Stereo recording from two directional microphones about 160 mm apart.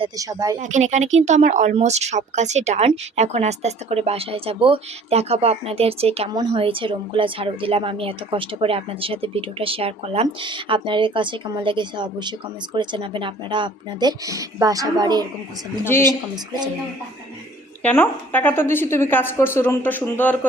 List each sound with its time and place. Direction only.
0.2 s speech: 20° right (ahead or behind)
0.6 s a woman's voice: 50° right (ahead or behind); by 15.3 s 25° right (ahead or behind)
15.8 s a woman's voice: 15° left (ahead or behind)
16.0 s speech: 25° right (ahead or behind)
17.8 s a woman's voice: 15° left (ahead or behind)